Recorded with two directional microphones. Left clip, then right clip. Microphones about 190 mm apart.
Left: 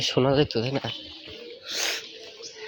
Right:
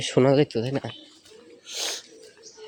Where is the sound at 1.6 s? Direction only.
10° right (ahead or behind).